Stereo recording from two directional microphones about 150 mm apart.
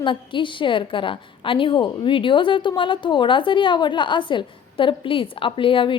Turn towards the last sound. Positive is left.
turn(degrees=35)  # may be behind; listen again after turning